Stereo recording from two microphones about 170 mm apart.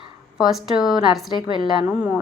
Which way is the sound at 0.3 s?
Centre (ahead or behind).